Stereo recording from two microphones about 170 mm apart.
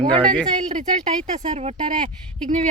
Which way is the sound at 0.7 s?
45° right (ahead or behind).